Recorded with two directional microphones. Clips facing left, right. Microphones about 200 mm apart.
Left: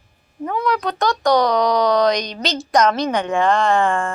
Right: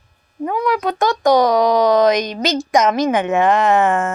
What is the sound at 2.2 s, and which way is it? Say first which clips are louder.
Speech: right 5 dB; 50° right (ahead or behind).